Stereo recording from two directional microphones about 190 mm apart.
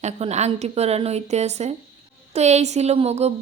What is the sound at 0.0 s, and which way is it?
A woman's voice, 35° right (ahead or behind).